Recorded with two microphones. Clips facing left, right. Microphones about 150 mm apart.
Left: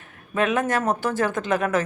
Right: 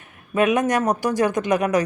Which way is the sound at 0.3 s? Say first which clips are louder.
Right 3 dB; 15° right (ahead or behind).